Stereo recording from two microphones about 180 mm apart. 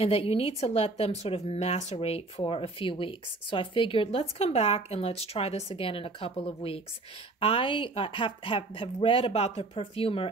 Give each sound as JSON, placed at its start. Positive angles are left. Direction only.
{"t": 0.0, "sound": "a woman's voice", "side_deg": 35}